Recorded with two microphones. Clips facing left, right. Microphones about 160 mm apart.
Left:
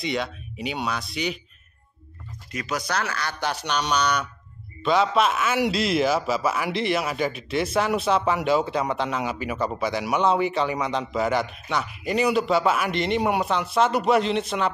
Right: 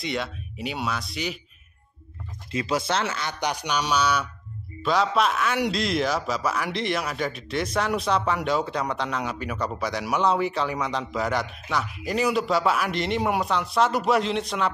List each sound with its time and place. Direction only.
0.0 s a man's voice: centre (ahead or behind)
2.5 s a man's voice: 25° right (ahead or behind); by 14.7 s centre (ahead or behind)